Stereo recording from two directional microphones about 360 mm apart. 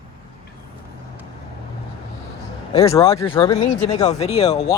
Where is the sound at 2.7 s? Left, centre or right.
Centre.